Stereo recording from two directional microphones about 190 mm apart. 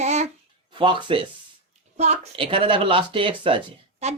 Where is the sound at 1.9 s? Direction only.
35° right (ahead or behind).